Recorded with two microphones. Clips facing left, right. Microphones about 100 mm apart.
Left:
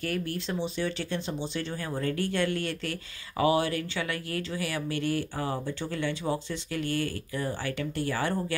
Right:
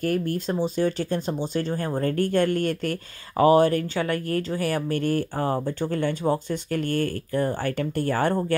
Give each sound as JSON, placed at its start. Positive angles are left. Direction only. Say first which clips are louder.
{"t": 0.0, "sound": "speech", "louder": "right 7 dB", "side_deg": -45}